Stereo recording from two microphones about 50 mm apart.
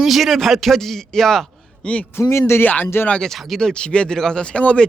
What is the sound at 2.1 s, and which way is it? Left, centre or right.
Speech, left.